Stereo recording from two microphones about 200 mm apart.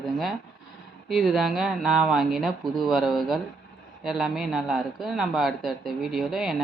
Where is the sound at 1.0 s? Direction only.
5° right (ahead or behind).